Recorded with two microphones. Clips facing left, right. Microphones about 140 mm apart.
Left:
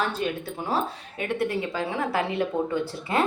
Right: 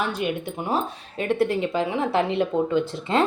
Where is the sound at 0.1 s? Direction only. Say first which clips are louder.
Right 2 dB; 15° right (ahead or behind).